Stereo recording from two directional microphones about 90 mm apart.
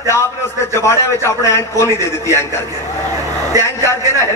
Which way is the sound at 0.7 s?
30° left (ahead or behind).